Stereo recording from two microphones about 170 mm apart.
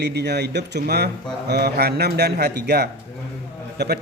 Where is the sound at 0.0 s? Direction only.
75° right (ahead or behind).